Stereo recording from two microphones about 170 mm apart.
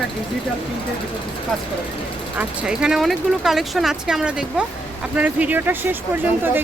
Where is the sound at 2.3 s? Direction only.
5° right (ahead or behind).